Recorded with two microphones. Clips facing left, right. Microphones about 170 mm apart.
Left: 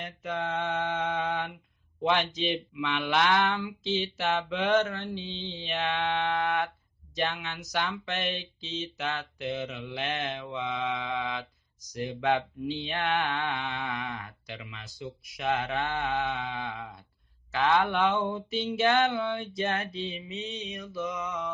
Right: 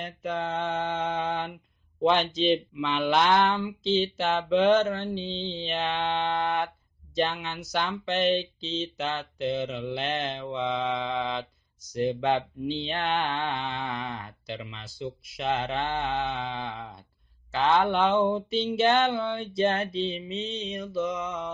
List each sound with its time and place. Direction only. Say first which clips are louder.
0.0 s speech: right 2 dB; 35° right (ahead or behind)